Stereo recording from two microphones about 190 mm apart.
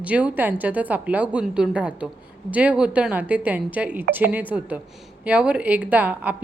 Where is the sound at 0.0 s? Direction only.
5° right (ahead or behind).